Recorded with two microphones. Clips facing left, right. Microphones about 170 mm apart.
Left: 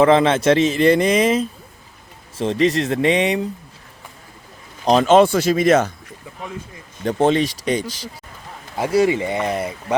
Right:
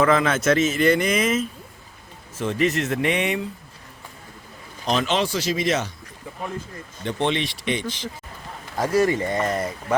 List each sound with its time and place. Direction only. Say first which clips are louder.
0.0 s speech: left 5 dB; 30° left (ahead or behind)
4.9 s speech: left 10 dB; 45° left (ahead or behind)
7.0 s speech: left 7 dB; 40° left (ahead or behind)
8.7 s speech: left 3 dB; 10° left (ahead or behind)